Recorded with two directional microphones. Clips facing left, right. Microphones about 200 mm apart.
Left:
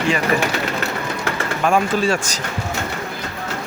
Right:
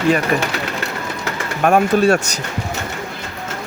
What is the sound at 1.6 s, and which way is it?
Speech, 65° right (ahead or behind).